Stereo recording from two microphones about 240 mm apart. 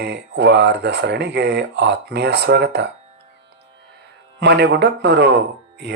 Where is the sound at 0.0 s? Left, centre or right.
Right.